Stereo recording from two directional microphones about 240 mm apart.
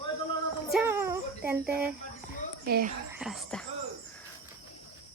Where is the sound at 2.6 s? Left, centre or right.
Right.